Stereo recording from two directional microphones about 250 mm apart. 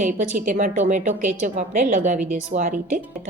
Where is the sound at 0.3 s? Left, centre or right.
Right.